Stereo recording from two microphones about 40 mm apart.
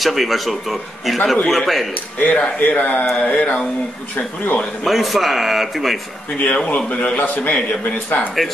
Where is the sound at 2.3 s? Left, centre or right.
Left.